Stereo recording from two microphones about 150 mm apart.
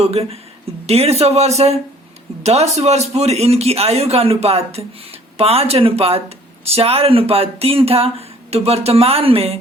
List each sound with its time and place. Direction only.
0.0 s a man's voice: 45° right (ahead or behind)